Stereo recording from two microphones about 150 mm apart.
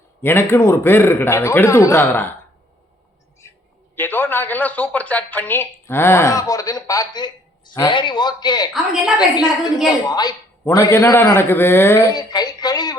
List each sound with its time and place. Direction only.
0.2 s a woman's voice: 15° left (ahead or behind)
3.9 s a woman's voice: 15° left (ahead or behind)
8.7 s a woman's voice: centre (ahead or behind)
9.1 s a woman's voice: 25° left (ahead or behind)
12.1 s speech: 25° left (ahead or behind)